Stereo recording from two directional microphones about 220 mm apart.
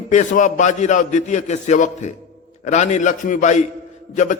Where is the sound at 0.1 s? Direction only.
35° left (ahead or behind).